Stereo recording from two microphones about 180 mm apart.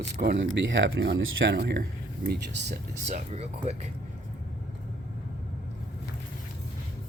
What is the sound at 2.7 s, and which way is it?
Speech, 40° right (ahead or behind).